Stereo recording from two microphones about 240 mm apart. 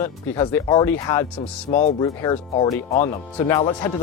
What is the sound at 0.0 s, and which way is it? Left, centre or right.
Speech, centre.